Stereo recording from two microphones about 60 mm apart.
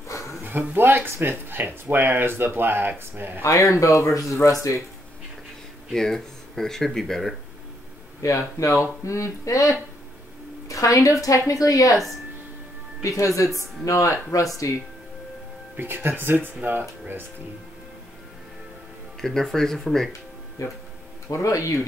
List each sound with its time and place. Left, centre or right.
0.4 s speech: right
3.4 s speech: left
5.9 s speech: centre
8.2 s a woman's voice: left
13.0 s speech: left
15.7 s speech: right
19.2 s speech: centre
20.1 s music: left
21.3 s speech: left